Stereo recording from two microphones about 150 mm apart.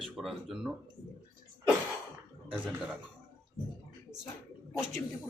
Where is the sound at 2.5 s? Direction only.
10° right (ahead or behind).